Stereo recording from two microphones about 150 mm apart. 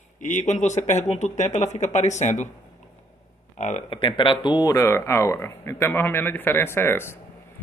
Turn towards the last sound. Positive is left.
turn(degrees=15)  # may be behind; listen again after turning